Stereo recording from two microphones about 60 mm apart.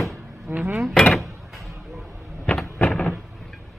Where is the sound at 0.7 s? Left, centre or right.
Centre.